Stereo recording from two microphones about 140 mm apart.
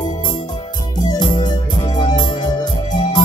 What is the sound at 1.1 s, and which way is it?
Music, 30° left (ahead or behind).